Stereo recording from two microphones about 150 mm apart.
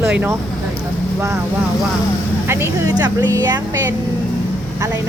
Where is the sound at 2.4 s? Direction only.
20° right (ahead or behind).